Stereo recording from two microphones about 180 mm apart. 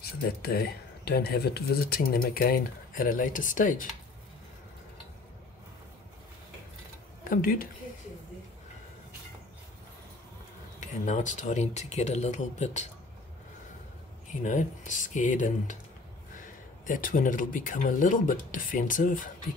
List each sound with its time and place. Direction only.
0.0 s speech: 60° left (ahead or behind)
7.2 s speech: 50° left (ahead or behind)
10.8 s speech: 45° left (ahead or behind)
14.4 s speech: 45° left (ahead or behind)
16.8 s speech: 50° left (ahead or behind)